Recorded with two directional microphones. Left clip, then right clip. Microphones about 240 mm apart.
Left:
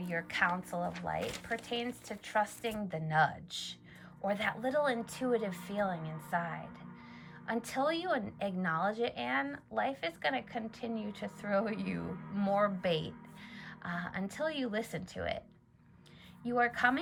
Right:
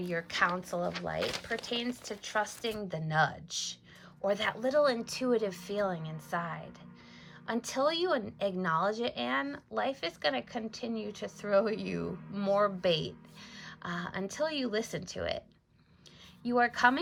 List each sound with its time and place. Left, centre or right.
0.1 s a woman's voice: centre